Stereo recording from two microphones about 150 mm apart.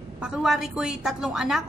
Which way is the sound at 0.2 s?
5° right (ahead or behind).